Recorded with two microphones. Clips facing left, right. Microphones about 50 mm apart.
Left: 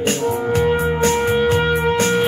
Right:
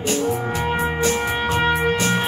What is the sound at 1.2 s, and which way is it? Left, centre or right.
Music, right.